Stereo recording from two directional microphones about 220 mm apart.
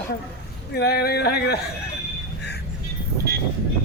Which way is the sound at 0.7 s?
45° left (ahead or behind).